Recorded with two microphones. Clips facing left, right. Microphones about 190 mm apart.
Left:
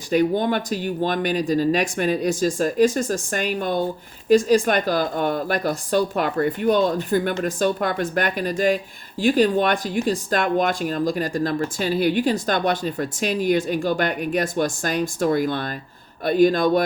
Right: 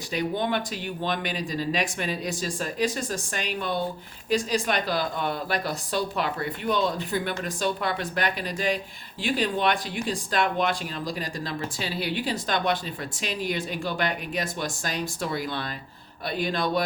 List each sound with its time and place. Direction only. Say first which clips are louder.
0.1 s speech: left 7 dB; 45° left (ahead or behind)